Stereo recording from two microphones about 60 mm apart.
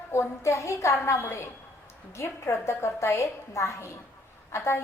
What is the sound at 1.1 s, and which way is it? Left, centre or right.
A woman's voice, left.